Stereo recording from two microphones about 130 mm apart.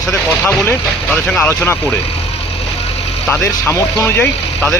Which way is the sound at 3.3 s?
20° left (ahead or behind).